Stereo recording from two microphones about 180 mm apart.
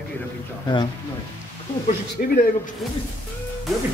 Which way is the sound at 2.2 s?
50° left (ahead or behind).